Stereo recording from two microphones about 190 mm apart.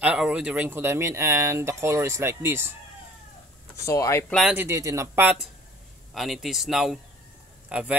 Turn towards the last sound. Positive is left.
turn(degrees=-5)  # may be behind; listen again after turning